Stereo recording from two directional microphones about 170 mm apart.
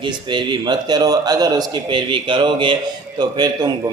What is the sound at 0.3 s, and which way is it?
A man's voice, 25° right (ahead or behind).